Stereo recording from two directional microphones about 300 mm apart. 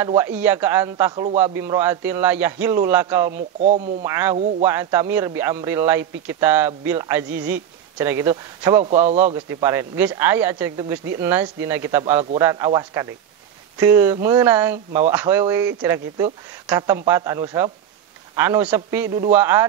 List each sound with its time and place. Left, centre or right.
0.1 s speech: centre
3.3 s speech: right
4.0 s speech: centre
9.2 s speech: centre
12.2 s speech: right